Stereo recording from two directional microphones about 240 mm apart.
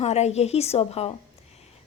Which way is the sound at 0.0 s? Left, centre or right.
Left.